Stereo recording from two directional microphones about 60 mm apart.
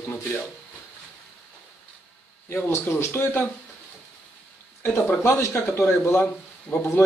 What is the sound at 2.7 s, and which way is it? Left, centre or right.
Speech, left.